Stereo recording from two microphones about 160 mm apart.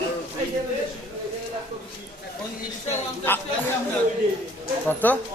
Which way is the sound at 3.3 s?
15° left (ahead or behind).